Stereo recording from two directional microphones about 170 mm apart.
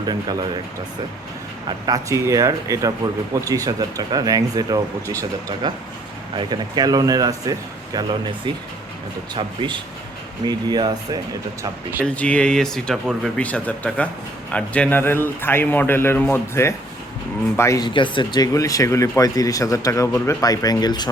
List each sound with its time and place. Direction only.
1.9 s speech: 20° right (ahead or behind)
9.3 s speech: 30° right (ahead or behind)
11.6 s speech: 10° right (ahead or behind)
12.0 s a man's voice: 5° left (ahead or behind); by 21.1 s 25° left (ahead or behind)